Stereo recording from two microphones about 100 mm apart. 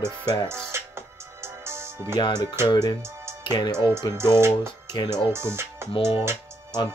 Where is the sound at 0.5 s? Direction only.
25° right (ahead or behind).